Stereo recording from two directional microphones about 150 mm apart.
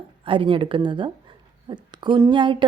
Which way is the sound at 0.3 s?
35° right (ahead or behind).